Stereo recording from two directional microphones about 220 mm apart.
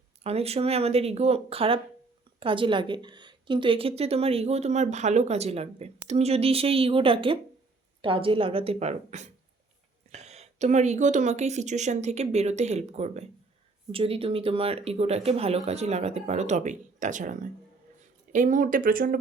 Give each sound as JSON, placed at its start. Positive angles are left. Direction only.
{"t": 0.2, "sound": "a woman's voice", "side_deg": -30}